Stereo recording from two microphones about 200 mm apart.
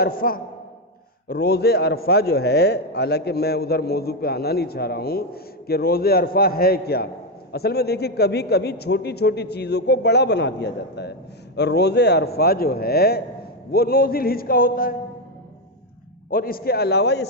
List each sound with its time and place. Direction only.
0.0 s a man's voice: 45° left (ahead or behind)
16.3 s a man's voice: 45° left (ahead or behind)